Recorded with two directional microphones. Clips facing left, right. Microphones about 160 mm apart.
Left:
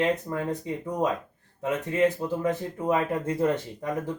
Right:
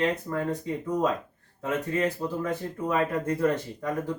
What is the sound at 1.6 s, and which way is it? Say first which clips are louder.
Speech: left 3 dB; 20° left (ahead or behind).